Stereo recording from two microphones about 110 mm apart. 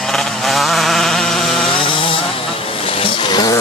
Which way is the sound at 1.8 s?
50° left (ahead or behind).